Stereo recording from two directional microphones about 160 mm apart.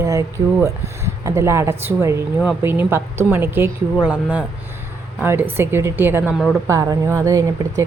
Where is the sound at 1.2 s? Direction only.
20° right (ahead or behind).